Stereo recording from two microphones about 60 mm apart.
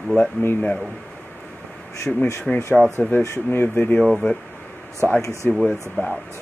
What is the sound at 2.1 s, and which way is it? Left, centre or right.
Speech, centre.